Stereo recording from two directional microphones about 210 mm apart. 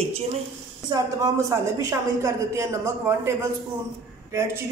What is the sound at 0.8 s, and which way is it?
Speech, 20° right (ahead or behind).